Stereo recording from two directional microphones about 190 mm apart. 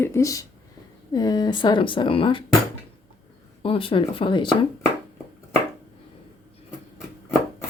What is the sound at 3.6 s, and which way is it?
A woman's voice, 30° left (ahead or behind).